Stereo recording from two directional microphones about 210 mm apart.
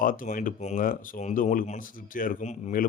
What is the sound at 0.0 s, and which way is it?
Speech, 40° left (ahead or behind).